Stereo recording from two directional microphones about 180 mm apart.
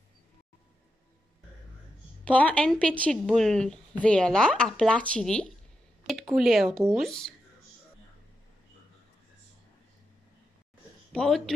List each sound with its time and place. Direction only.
2.2 s a woman's voice: 5° left (ahead or behind)
11.1 s speech: centre (ahead or behind)